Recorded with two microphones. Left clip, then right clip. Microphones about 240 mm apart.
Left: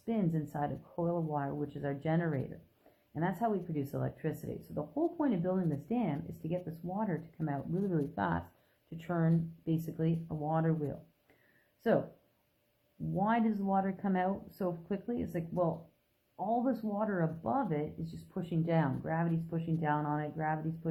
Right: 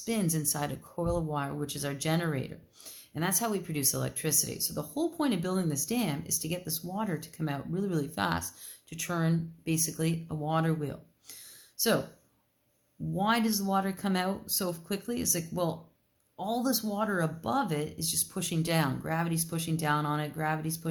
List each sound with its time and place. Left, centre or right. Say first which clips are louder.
0.0 s speech: right 3 dB; right
10.2 s speech: right 4 dB; right
13.1 s speech: right 3 dB; right